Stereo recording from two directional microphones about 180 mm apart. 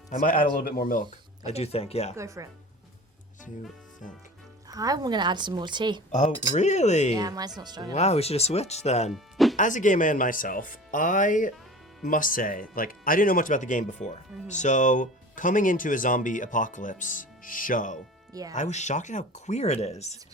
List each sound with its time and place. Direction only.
0.1 s speech: 45° left (ahead or behind)
1.5 s speech: 35° left (ahead or behind)
2.1 s speech: 15° right (ahead or behind)
4.7 s a woman's voice: 20° right (ahead or behind)
6.1 s speech: 45° left (ahead or behind)
7.2 s a woman's voice: 20° right (ahead or behind)
7.9 s speech: 35° left (ahead or behind)
9.1 s music: centre (ahead or behind)
9.6 s speech: 45° left (ahead or behind)